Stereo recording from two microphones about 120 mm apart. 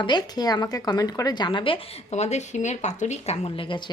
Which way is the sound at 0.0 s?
35° left (ahead or behind).